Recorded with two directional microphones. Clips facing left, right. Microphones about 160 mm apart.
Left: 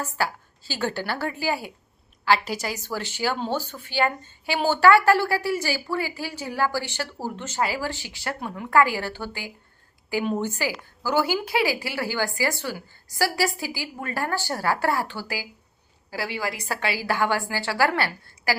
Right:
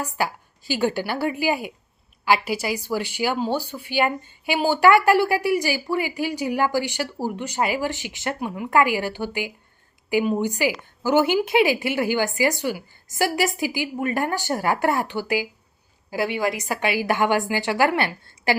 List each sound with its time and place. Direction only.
0.0 s a woman's voice: 15° right (ahead or behind)